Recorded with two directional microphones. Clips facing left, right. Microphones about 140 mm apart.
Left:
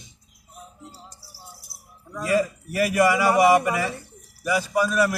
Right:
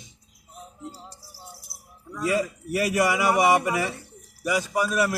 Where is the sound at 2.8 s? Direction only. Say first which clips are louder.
Left 3 dB; 20° right (ahead or behind).